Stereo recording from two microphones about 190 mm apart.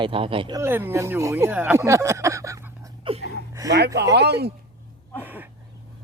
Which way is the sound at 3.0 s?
30° right (ahead or behind).